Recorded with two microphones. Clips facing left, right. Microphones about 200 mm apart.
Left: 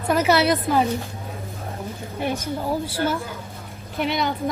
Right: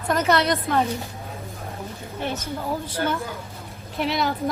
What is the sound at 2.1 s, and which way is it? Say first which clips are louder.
A woman's voice: left 3 dB; 10° left (ahead or behind).